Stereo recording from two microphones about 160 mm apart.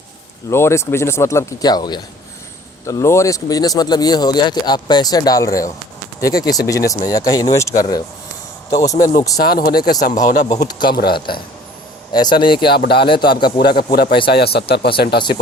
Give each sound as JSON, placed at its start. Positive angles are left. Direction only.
{"t": 0.5, "sound": "speech", "side_deg": 15}
{"t": 9.4, "sound": "speech", "side_deg": 65}
{"t": 10.0, "sound": "speech", "side_deg": 50}
{"t": 10.7, "sound": "speech", "side_deg": 30}
{"t": 10.9, "sound": "speech", "side_deg": 75}
{"t": 12.1, "sound": "speech", "side_deg": 30}
{"t": 13.7, "sound": "speech", "side_deg": 70}
{"t": 14.1, "sound": "speech", "side_deg": 35}
{"t": 14.3, "sound": "speech", "side_deg": 85}